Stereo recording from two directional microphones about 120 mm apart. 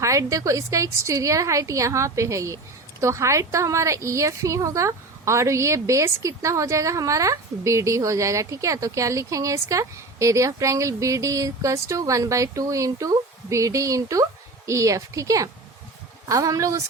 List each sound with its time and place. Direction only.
0.0 s a woman's voice: 25° right (ahead or behind)